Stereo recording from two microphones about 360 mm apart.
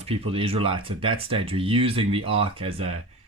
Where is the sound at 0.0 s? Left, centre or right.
Centre.